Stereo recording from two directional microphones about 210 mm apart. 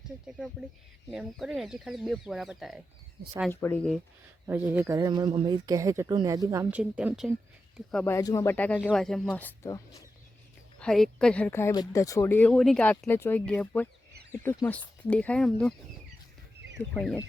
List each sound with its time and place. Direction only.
0.3 s speech: 5° right (ahead or behind)
3.5 s speech: 10° left (ahead or behind)
4.4 s speech: 10° right (ahead or behind)
7.9 s speech: 5° left (ahead or behind)
10.8 s speech: centre (ahead or behind)
16.9 s speech: 5° left (ahead or behind)